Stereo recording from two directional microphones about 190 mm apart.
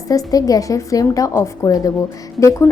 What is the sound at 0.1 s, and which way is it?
A woman's voice, 20° left (ahead or behind).